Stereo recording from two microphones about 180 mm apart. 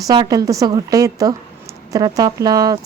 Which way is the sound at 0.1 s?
20° right (ahead or behind).